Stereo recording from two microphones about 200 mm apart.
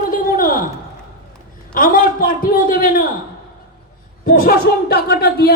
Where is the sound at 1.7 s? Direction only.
45° left (ahead or behind).